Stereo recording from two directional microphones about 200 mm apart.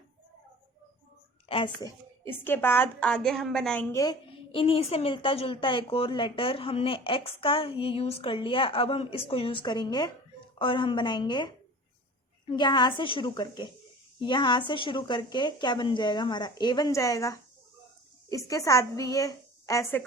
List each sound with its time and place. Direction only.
1.5 s a woman's voice: 25° left (ahead or behind)
2.2 s a woman's voice: 10° left (ahead or behind)
3.9 s a woman's voice: 20° left (ahead or behind)
12.5 s a woman's voice: 25° left (ahead or behind)